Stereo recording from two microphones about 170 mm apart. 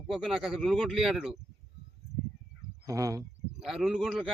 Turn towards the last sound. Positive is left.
turn(degrees=-5)  # may be behind; listen again after turning